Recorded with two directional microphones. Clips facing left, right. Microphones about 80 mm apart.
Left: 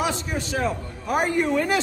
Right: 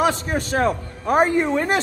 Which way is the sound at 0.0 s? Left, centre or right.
Right.